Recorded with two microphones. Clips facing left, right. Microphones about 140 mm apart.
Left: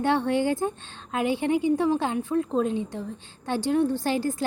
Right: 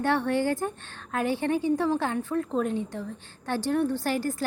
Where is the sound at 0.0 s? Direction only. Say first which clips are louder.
Left 2 dB; 20° left (ahead or behind).